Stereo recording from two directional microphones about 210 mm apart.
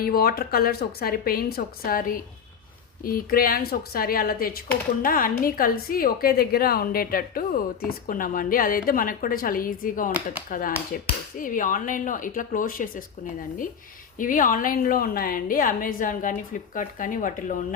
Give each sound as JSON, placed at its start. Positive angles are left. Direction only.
{"t": 0.0, "sound": "a woman's voice", "side_deg": 45}
{"t": 14.2, "sound": "a woman's voice", "side_deg": 40}